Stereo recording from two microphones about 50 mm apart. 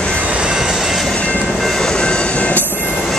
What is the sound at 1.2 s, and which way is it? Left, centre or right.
Train, left.